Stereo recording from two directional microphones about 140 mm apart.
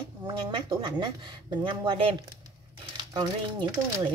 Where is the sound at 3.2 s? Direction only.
30° right (ahead or behind).